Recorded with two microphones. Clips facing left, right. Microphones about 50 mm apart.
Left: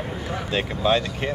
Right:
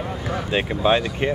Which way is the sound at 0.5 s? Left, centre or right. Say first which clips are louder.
Right 2 dB; right.